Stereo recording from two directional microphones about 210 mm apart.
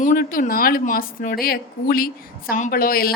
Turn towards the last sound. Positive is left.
turn(degrees=45)  # may be behind; listen again after turning